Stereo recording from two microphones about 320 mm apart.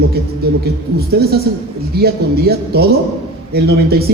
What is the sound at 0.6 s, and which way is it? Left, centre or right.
A woman's voice, right.